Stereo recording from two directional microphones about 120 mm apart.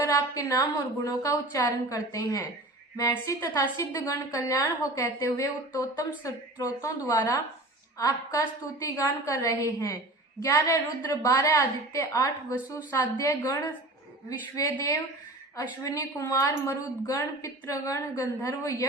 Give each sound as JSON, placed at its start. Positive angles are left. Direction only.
{"t": 0.1, "sound": "a woman's voice", "side_deg": 30}
{"t": 7.9, "sound": "a woman's voice", "side_deg": 25}